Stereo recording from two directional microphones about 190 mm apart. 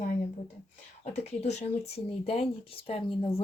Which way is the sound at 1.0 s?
35° left (ahead or behind).